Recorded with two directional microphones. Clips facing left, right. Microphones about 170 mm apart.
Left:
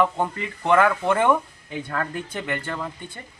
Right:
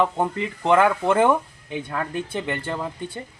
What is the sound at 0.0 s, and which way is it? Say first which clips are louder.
Speech: right 1 dB; 30° right (ahead or behind).